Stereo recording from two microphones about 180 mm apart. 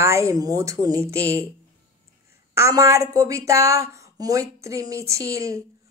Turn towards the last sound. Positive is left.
turn(degrees=-15)  # may be behind; listen again after turning